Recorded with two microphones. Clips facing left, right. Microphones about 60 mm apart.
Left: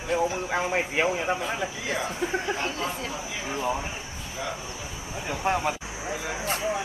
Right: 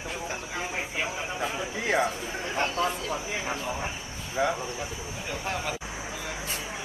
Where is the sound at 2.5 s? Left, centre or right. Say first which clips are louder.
Right 1 dB; right.